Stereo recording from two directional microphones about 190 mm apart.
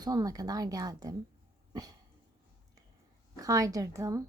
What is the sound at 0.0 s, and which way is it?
Speech, 20° right (ahead or behind).